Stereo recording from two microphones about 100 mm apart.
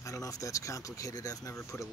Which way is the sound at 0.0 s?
35° left (ahead or behind).